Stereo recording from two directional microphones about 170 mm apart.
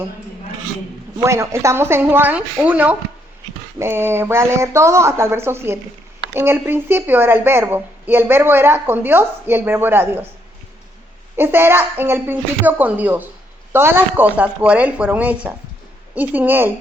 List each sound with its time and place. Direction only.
1.2 s a woman's voice: 15° right (ahead or behind)
11.3 s a woman's voice: 15° right (ahead or behind)